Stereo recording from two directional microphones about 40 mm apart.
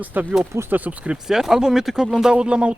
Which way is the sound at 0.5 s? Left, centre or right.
Right.